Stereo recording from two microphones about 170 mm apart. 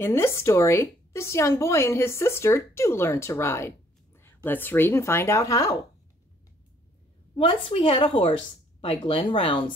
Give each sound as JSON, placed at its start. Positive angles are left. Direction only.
{"t": 0.0, "sound": "a woman's voice", "side_deg": 15}
{"t": 7.3, "sound": "a woman's voice", "side_deg": 30}